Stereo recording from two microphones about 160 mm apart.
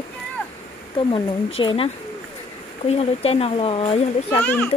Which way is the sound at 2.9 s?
40° left (ahead or behind).